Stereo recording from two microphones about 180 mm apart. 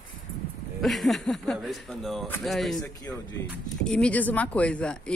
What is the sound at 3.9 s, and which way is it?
A woman's voice, 5° left (ahead or behind).